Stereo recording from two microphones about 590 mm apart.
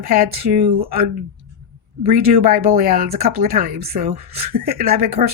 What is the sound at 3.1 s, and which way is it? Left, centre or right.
Speech, right.